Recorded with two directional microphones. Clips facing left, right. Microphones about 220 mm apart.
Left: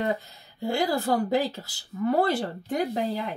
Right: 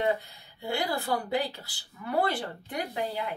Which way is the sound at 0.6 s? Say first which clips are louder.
Left 5 dB; 40° left (ahead or behind).